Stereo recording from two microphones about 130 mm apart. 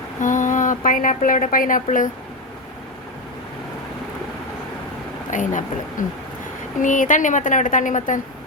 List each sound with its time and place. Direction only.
0.2 s a woman's voice: 75° left (ahead or behind)
5.3 s speech: 80° left